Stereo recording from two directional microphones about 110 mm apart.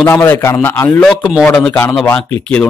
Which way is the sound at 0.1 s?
20° left (ahead or behind).